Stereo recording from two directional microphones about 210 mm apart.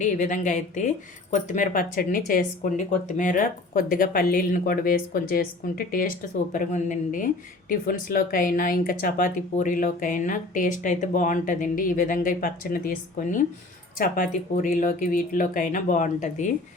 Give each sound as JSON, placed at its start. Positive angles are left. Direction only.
{"t": 0.0, "sound": "speech", "side_deg": 35}